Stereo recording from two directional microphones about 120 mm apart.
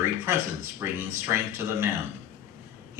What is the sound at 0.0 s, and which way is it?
Speech, 20° right (ahead or behind).